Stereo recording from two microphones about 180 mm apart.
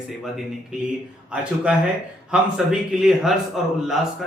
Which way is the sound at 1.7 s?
5° right (ahead or behind).